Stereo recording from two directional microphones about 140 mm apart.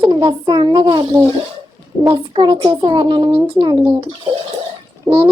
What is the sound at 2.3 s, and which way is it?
A child's voice, 40° right (ahead or behind).